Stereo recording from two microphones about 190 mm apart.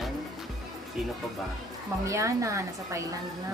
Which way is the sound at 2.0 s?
15° right (ahead or behind).